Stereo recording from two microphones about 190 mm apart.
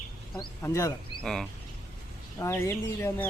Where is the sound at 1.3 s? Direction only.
5° left (ahead or behind).